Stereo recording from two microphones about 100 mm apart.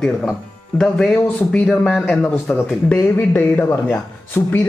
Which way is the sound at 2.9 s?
20° left (ahead or behind).